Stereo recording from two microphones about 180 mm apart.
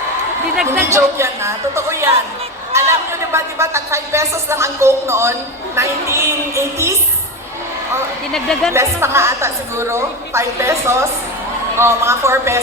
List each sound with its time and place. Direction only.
0.7 s a man's voice: 15° right (ahead or behind)
8.3 s a woman's voice: 5° left (ahead or behind)
8.7 s a man's voice: 15° right (ahead or behind)